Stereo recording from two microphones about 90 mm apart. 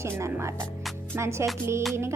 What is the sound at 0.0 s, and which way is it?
A woman's voice, 30° right (ahead or behind).